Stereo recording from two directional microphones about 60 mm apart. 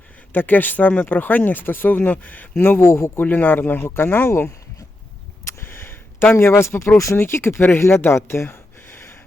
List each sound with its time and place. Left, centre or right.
0.3 s speech: left
2.8 s speech: left
3.2 s speech: left
3.8 s speech: left
5.6 s a sound: left
6.6 s speech: left